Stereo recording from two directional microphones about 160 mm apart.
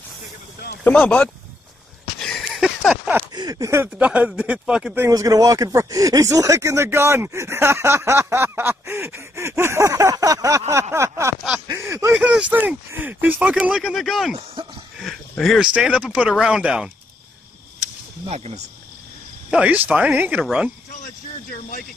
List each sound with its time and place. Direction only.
0.8 s speech: 10° left (ahead or behind)
2.1 s a sound: 5° left (ahead or behind)
3.3 s speech: 20° right (ahead or behind); by 5.0 s 5° right (ahead or behind)
5.0 s speech: 20° right (ahead or behind); by 16.9 s 5° right (ahead or behind)
18.3 s speech: 40° right (ahead or behind)
19.5 s speech: 10° right (ahead or behind)